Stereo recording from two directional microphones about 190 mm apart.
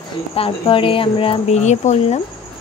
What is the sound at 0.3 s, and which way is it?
Speech, 30° left (ahead or behind).